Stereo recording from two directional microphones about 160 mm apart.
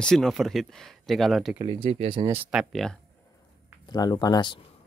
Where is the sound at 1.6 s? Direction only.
30° right (ahead or behind).